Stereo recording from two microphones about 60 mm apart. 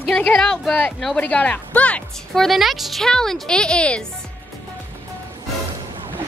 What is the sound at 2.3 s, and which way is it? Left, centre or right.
A woman's voice, centre.